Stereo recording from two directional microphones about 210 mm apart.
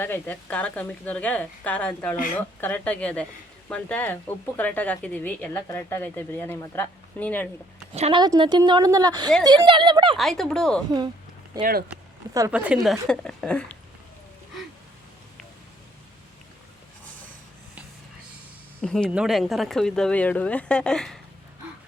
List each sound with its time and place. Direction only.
0.0 s speech: 10° left (ahead or behind)
7.9 s a woman's voice: 30° right (ahead or behind)
8.2 s a woman's voice: 20° right (ahead or behind)
10.2 s speech: centre (ahead or behind)
11.6 s speech: 45° right (ahead or behind)
12.5 s speech: 5° right (ahead or behind)
18.8 s speech: 5° left (ahead or behind)